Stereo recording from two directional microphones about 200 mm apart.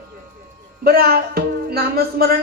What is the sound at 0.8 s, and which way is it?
Music, 50° right (ahead or behind).